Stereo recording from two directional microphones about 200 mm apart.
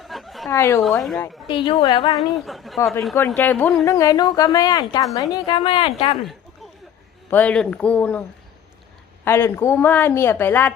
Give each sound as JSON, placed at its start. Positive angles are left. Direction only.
{"t": 0.0, "sound": "chuckle", "side_deg": 0}
{"t": 0.5, "sound": "a woman's voice", "side_deg": 15}
{"t": 0.8, "sound": "speech", "side_deg": 0}
{"t": 1.5, "sound": "a woman's voice", "side_deg": 25}
{"t": 2.1, "sound": "speech", "side_deg": 0}
{"t": 2.7, "sound": "a woman's voice", "side_deg": 15}
{"t": 3.8, "sound": "a woman's voice", "side_deg": 15}
{"t": 7.3, "sound": "a woman's voice", "side_deg": 10}
{"t": 9.2, "sound": "a woman's voice", "side_deg": 10}